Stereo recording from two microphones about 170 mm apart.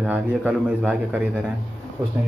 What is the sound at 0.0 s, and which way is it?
A man's voice, 5° right (ahead or behind).